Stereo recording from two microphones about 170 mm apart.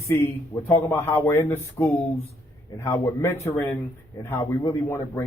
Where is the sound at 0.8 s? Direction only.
15° left (ahead or behind).